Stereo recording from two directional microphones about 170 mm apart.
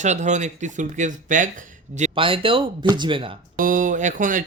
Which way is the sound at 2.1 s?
30° right (ahead or behind).